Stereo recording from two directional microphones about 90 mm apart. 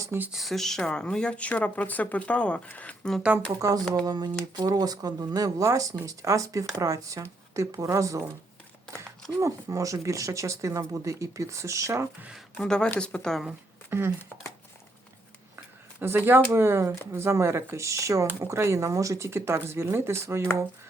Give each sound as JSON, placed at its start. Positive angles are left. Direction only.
{"t": 0.3, "sound": "speech", "side_deg": 0}
{"t": 3.5, "sound": "speech", "side_deg": -40}
{"t": 9.4, "sound": "speech", "side_deg": -35}
{"t": 12.5, "sound": "speech", "side_deg": 10}
{"t": 13.9, "sound": "speech", "side_deg": -25}
{"t": 15.5, "sound": "speech", "side_deg": -25}